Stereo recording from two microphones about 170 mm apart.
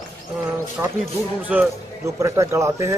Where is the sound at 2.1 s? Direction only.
15° right (ahead or behind).